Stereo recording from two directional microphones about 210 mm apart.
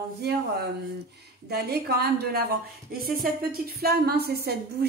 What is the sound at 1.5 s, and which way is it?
A woman's voice, 50° right (ahead or behind).